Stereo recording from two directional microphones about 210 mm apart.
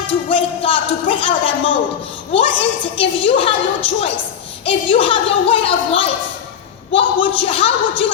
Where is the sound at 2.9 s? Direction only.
25° left (ahead or behind).